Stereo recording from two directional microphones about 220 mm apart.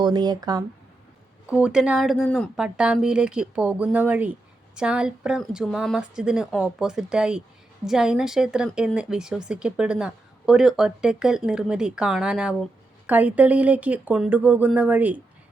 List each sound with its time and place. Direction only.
0.0 s speech: 20° right (ahead or behind)
1.5 s speech: 5° right (ahead or behind)